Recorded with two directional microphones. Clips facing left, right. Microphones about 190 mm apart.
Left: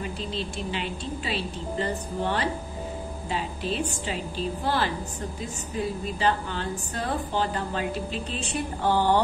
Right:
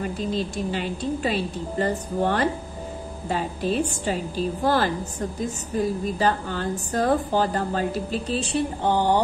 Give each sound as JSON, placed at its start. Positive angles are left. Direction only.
{"t": 0.0, "sound": "a woman's voice", "side_deg": -45}
{"t": 8.8, "sound": "speech", "side_deg": -15}